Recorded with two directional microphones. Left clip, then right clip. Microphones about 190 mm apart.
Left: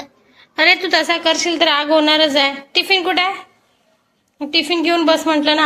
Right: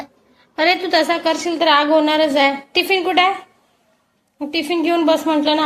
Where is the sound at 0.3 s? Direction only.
Centre (ahead or behind).